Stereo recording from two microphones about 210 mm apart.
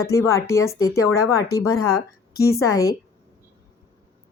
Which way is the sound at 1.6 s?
90° left.